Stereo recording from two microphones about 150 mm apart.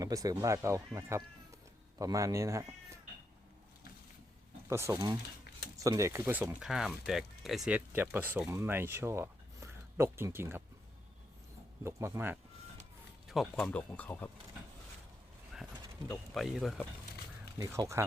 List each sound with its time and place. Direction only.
0.0 s speech: 25° right (ahead or behind)
4.7 s speech: 15° right (ahead or behind); by 7.8 s centre (ahead or behind)
7.9 s speech: 15° right (ahead or behind)
11.8 s speech: 15° right (ahead or behind)
13.2 s speech: centre (ahead or behind)
13.7 s speech: 10° left (ahead or behind)
16.0 s speech: centre (ahead or behind)
17.6 s speech: 20° right (ahead or behind)